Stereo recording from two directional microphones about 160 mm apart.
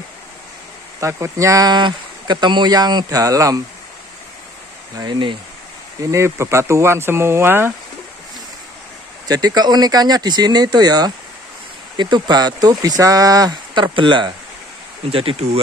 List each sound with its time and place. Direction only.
1.0 s speech: 20° right (ahead or behind)
5.0 s speech: 30° right (ahead or behind)
6.1 s speech: 15° right (ahead or behind)
9.3 s speech: 25° right (ahead or behind); by 15.6 s 40° right (ahead or behind)